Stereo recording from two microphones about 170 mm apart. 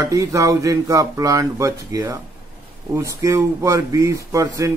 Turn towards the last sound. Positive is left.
turn(degrees=-20)  # may be behind; listen again after turning